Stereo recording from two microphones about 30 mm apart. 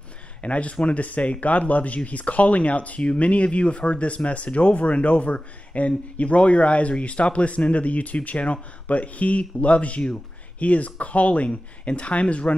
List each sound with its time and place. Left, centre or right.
0.4 s speech: left